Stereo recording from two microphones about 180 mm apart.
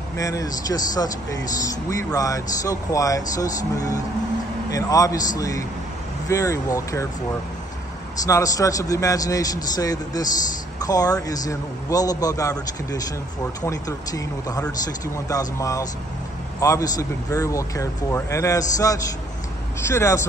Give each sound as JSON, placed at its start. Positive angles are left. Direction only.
{"t": 0.2, "sound": "speech", "side_deg": 20}
{"t": 8.3, "sound": "speech", "side_deg": 20}